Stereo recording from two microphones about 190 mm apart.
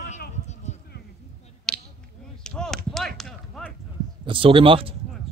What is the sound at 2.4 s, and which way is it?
Chop, 5° left (ahead or behind).